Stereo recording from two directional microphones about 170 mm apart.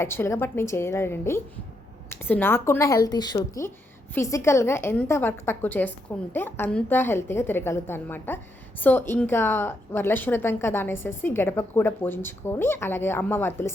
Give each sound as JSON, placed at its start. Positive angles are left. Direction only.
{"t": 0.0, "sound": "a woman's voice", "side_deg": 15}